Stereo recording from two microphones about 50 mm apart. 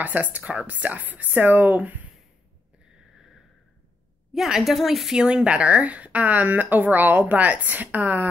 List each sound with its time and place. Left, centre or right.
0.0 s speech: right
4.3 s a woman's voice: centre
5.1 s speech: centre; by 8.3 s right